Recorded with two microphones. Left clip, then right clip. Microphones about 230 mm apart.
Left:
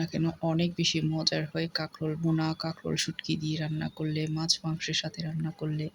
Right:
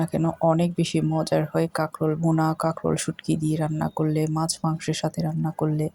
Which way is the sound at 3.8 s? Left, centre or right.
Centre.